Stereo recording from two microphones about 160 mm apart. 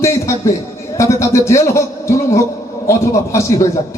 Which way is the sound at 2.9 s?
15° left (ahead or behind).